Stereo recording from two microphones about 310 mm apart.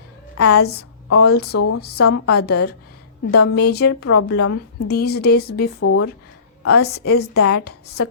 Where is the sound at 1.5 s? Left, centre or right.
Left.